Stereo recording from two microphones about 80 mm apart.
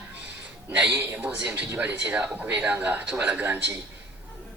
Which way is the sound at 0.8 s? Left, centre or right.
Centre.